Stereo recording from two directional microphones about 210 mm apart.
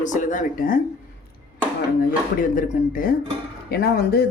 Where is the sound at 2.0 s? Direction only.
40° left (ahead or behind).